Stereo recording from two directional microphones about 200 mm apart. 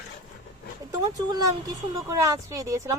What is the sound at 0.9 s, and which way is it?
Speech, 20° right (ahead or behind).